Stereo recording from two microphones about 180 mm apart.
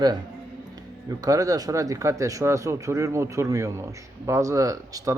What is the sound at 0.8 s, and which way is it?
Speech, 20° right (ahead or behind).